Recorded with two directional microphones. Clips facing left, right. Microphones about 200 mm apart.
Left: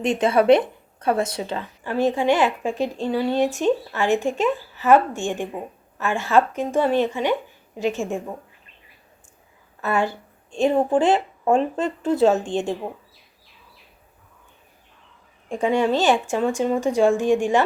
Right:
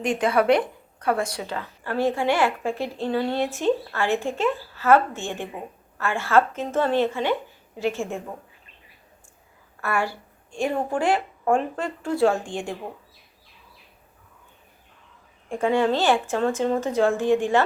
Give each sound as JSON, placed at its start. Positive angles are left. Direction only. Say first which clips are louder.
{"t": 0.0, "sound": "a woman's voice", "louder": "left 3 dB", "side_deg": 25}
{"t": 9.8, "sound": "speech", "louder": "left 3 dB", "side_deg": 20}
{"t": 15.4, "sound": "a woman's voice", "louder": "left 1 dB", "side_deg": 15}